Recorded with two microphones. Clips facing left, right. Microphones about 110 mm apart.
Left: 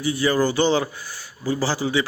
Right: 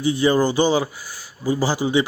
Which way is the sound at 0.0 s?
20° right (ahead or behind).